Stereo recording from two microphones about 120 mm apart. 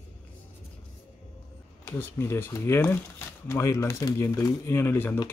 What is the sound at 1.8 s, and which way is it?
Speech, 15° left (ahead or behind).